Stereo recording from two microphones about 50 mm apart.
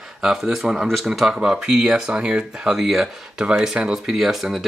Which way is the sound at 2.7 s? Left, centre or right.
Centre.